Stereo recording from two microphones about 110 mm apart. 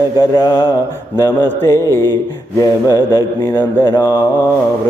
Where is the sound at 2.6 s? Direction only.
30° left (ahead or behind).